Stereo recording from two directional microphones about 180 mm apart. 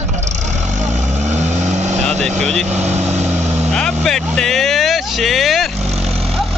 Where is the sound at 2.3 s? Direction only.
40° right (ahead or behind).